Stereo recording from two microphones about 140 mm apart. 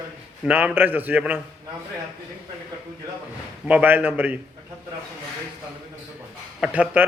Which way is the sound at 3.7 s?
10° right (ahead or behind).